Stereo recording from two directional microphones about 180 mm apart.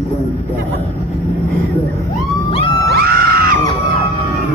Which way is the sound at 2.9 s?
60° right (ahead or behind).